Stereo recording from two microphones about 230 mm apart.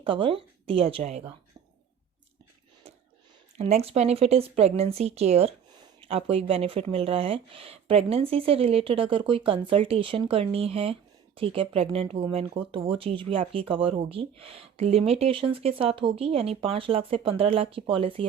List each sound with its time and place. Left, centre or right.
0.0 s speech: right
2.8 s a sound: right
3.6 s speech: right